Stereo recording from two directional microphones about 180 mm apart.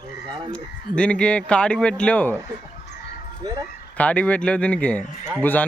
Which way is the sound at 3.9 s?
10° left (ahead or behind).